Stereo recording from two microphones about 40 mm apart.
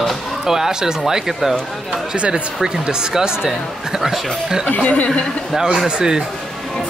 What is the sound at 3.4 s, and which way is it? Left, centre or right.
Speech, centre.